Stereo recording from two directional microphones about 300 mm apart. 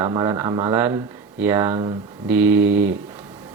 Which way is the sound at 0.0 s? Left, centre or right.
Centre.